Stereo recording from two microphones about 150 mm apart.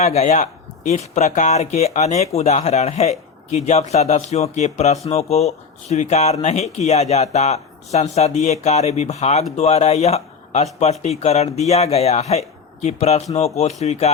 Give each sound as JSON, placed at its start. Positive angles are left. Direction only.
{"t": 0.0, "sound": "speech", "side_deg": 50}